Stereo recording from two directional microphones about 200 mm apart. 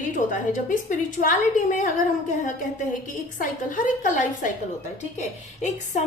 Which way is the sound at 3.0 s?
40° left (ahead or behind).